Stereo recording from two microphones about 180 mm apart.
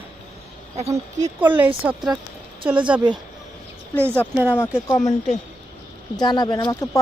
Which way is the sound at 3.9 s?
10° left (ahead or behind).